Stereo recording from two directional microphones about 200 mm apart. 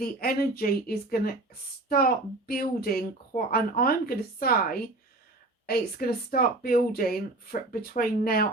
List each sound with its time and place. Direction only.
0.0 s a child's voice: 50° left (ahead or behind)